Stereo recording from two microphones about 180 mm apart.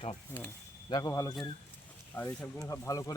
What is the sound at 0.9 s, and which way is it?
Speech, 20° left (ahead or behind).